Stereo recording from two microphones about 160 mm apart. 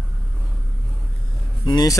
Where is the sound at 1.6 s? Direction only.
20° left (ahead or behind).